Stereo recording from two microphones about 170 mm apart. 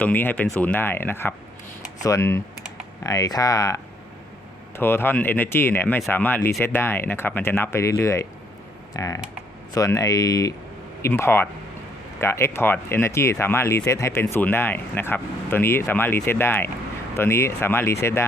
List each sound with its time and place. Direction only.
0.0 s speech: 10° left (ahead or behind)
4.8 s speech: 15° left (ahead or behind)